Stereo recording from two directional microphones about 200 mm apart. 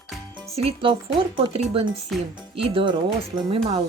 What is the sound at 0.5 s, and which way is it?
Speech, 25° right (ahead or behind).